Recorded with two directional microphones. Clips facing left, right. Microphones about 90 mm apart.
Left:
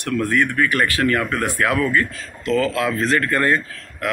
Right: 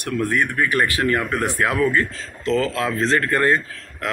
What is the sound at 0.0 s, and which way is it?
Speech, 20° right (ahead or behind).